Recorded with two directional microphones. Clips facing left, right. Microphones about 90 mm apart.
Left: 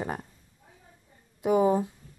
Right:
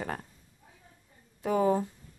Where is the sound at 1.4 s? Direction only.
15° left (ahead or behind).